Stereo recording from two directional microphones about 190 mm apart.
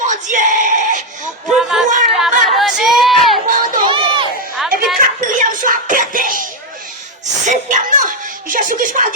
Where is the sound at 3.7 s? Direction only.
25° right (ahead or behind).